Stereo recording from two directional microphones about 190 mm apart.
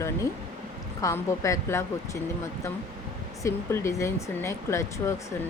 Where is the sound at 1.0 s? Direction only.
15° left (ahead or behind).